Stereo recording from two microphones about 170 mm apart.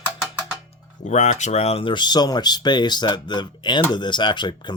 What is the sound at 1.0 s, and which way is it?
Speech, 40° left (ahead or behind).